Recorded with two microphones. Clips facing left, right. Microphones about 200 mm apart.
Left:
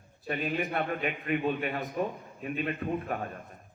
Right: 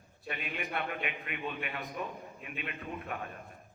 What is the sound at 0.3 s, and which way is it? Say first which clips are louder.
A man's voice: left 8 dB; 40° left (ahead or behind).